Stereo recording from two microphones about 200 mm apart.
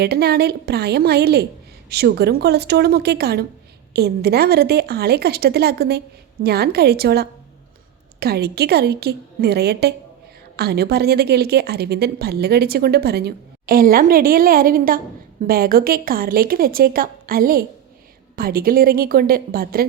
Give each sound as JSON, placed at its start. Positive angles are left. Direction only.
{"t": 0.0, "sound": "a woman's voice", "side_deg": -50}